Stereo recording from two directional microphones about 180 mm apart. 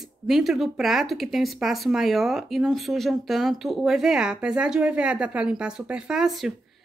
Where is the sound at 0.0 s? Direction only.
Centre (ahead or behind).